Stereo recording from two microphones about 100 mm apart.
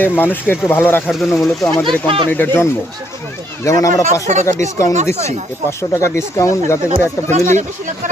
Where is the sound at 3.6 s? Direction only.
35° left (ahead or behind).